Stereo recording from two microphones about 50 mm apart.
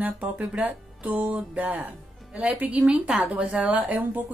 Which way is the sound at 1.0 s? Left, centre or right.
Right.